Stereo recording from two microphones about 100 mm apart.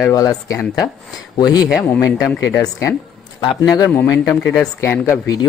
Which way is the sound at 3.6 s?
35° left (ahead or behind).